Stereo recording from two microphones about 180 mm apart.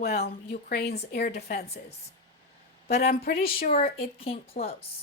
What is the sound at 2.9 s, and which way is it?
Speech, 60° left (ahead or behind).